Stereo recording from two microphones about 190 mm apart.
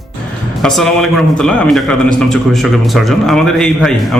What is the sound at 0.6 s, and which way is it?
A man's voice, centre (ahead or behind).